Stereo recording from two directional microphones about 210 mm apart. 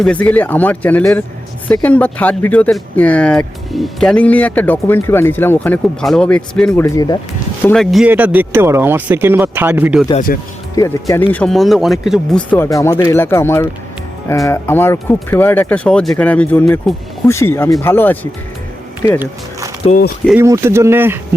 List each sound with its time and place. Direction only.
0.0 s speech: 5° left (ahead or behind)
6.8 s speech: 15° left (ahead or behind)
7.6 s speech: 5° left (ahead or behind)
10.3 s speech: 40° left (ahead or behind)
10.8 s speech: 15° left (ahead or behind)
11.3 s speech: 5° left (ahead or behind)
19.8 s speech: 25° left (ahead or behind)
20.4 s speech: 10° right (ahead or behind)